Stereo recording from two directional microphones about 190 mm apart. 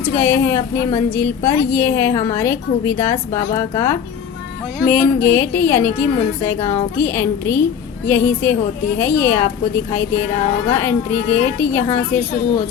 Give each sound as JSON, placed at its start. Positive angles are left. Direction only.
{"t": 0.0, "sound": "a woman's voice", "side_deg": 10}
{"t": 10.7, "sound": "a woman's voice", "side_deg": 10}